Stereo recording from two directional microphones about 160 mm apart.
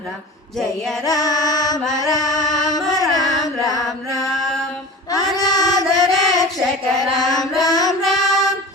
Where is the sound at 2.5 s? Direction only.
25° left (ahead or behind).